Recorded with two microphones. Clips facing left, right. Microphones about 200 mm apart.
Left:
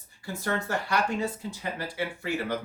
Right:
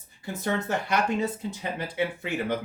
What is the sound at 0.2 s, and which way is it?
Speech, 20° right (ahead or behind).